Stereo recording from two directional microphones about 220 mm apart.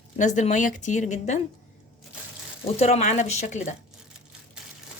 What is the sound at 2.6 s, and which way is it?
A woman's voice, 30° left (ahead or behind).